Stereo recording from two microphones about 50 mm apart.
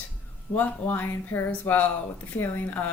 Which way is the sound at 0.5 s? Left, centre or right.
Left.